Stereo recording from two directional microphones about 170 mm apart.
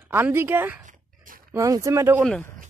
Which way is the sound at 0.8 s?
50° right (ahead or behind).